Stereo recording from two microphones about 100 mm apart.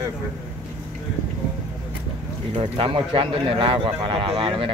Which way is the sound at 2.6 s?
65° right (ahead or behind).